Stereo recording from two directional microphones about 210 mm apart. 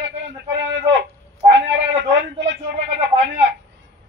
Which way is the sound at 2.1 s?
60° right (ahead or behind).